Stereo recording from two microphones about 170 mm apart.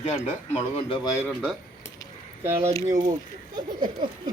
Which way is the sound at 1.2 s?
10° left (ahead or behind).